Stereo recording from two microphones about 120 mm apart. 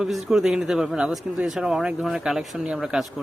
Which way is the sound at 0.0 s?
5° right (ahead or behind).